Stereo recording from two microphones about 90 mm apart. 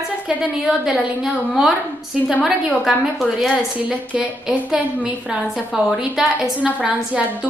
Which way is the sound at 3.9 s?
15° right (ahead or behind).